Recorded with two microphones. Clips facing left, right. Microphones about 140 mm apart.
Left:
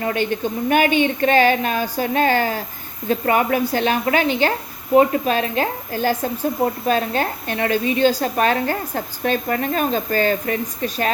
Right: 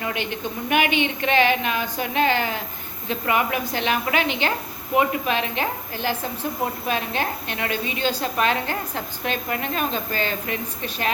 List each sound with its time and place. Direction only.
0.0 s a woman's voice: 40° left (ahead or behind)